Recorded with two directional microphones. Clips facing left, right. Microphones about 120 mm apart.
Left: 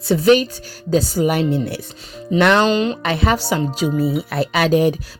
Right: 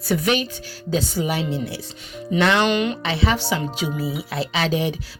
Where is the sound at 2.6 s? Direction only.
30° left (ahead or behind).